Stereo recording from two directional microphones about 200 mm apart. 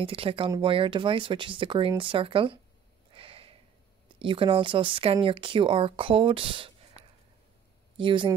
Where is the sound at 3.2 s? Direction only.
25° right (ahead or behind).